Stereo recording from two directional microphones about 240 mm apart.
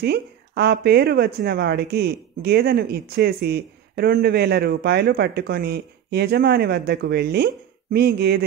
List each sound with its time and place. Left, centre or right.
0.0 s speech: right